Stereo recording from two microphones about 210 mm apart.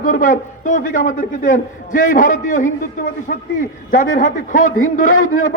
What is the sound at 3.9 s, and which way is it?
Speech, 40° left (ahead or behind).